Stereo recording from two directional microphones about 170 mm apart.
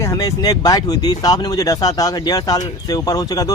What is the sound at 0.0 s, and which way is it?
Speech, 20° left (ahead or behind).